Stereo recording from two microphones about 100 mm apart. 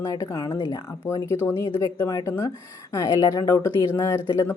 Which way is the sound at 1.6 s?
30° left (ahead or behind).